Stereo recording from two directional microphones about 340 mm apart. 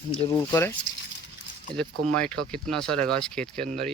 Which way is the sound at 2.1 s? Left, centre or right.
Centre.